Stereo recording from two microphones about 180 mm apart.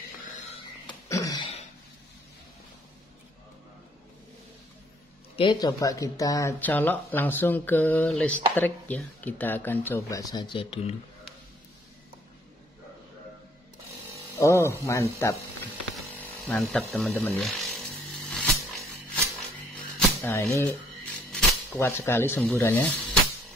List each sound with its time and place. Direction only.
0.8 s throat clearing: 20° left (ahead or behind)
5.3 s speech: 25° left (ahead or behind)
14.4 s speech: 15° left (ahead or behind)
16.0 s tools: 10° left (ahead or behind)
17.1 s speech: 10° left (ahead or behind)
17.4 s music: centre (ahead or behind)
20.2 s speech: 15° left (ahead or behind)